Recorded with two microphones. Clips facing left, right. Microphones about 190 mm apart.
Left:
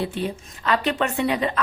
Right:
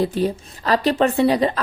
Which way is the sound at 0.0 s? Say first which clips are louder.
Right 6 dB; 40° right (ahead or behind).